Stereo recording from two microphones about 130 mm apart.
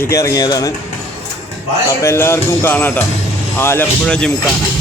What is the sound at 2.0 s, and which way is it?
Speech, 20° left (ahead or behind).